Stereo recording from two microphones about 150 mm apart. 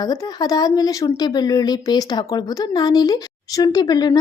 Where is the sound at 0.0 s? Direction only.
25° left (ahead or behind).